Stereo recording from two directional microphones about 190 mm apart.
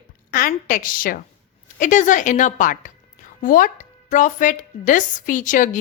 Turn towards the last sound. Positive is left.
turn(degrees=45)  # may be behind; listen again after turning